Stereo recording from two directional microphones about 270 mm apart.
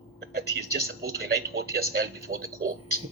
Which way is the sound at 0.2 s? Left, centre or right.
Right.